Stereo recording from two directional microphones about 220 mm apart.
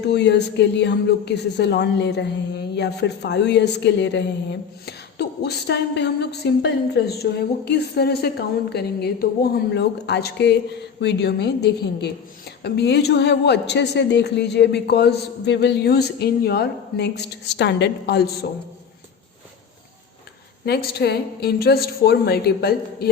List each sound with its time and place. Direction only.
0.1 s a woman's voice: 50° left (ahead or behind)
20.7 s a woman's voice: 50° left (ahead or behind)